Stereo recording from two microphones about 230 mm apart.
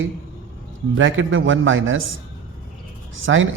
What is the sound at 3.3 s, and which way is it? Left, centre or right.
Speech, right.